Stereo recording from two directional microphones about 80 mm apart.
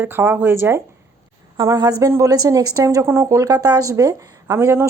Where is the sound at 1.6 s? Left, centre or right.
Right.